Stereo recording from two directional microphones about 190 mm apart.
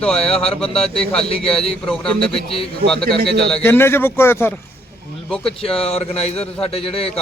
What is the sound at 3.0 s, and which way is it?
Speech, 55° right (ahead or behind).